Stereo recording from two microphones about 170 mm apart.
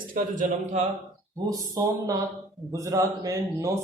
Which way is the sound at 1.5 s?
20° right (ahead or behind).